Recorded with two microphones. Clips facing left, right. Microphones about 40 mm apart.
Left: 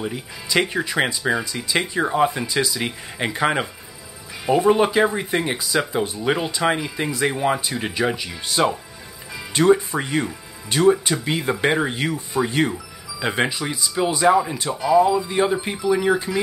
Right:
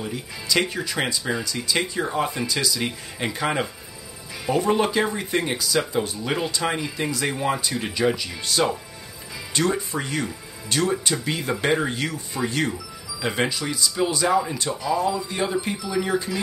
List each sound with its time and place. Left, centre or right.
0.0 s speech: centre
4.6 s speech: centre